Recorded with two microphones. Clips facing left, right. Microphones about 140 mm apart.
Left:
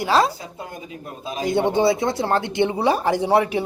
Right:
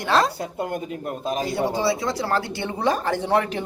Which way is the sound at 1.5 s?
25° left (ahead or behind).